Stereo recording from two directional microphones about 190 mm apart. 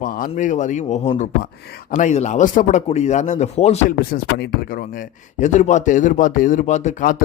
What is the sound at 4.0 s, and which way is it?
A man's voice, 55° left (ahead or behind).